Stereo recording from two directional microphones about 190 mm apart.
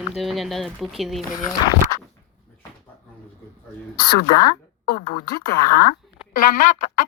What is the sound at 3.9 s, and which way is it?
Speech, 20° left (ahead or behind).